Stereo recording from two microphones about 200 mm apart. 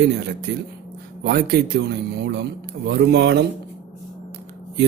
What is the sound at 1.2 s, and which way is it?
Speech, 55° right (ahead or behind).